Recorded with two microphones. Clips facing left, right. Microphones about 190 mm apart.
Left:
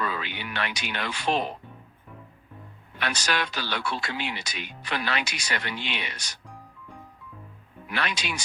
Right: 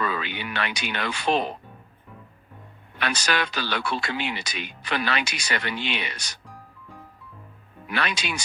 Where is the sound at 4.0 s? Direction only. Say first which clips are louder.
Right 3 dB; 70° right (ahead or behind).